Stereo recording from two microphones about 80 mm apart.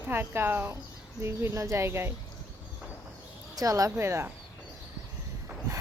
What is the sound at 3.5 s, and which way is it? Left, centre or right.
Speech, right.